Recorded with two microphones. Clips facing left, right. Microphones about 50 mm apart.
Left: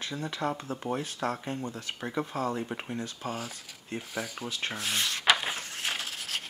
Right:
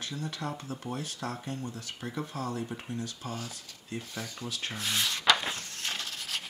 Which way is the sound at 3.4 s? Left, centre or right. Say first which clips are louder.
Left 2 dB; centre.